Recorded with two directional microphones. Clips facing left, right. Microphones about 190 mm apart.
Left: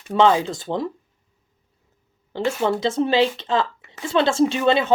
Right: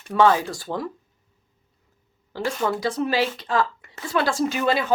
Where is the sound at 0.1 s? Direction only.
25° left (ahead or behind).